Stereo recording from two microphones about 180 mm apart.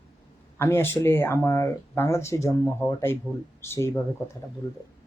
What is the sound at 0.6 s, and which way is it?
Speech, 10° left (ahead or behind).